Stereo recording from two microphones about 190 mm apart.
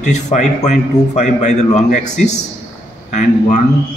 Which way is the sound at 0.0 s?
40° left (ahead or behind).